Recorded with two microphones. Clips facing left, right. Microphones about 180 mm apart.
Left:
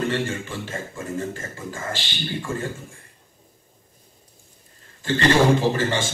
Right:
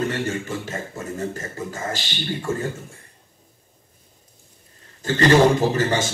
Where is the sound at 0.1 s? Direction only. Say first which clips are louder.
Right 1 dB; 40° right (ahead or behind).